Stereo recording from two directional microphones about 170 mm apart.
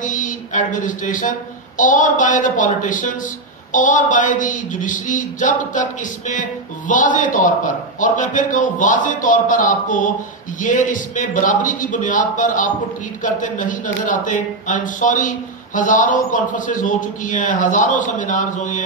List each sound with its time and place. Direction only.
0.0 s speech: 50° left (ahead or behind)